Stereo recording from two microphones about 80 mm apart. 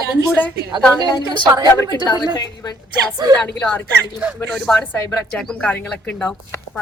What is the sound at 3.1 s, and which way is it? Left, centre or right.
Speech, right.